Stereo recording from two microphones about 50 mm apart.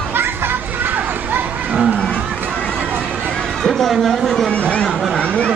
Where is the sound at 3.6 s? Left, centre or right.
Centre.